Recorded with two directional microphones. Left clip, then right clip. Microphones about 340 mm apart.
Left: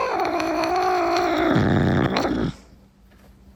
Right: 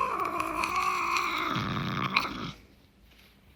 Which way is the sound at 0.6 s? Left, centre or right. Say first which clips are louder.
Left 7 dB; centre.